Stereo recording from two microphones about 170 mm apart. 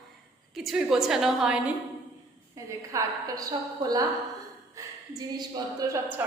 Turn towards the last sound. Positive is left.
turn(degrees=-10)  # may be behind; listen again after turning